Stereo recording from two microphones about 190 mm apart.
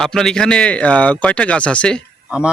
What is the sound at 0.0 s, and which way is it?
Speech, centre (ahead or behind).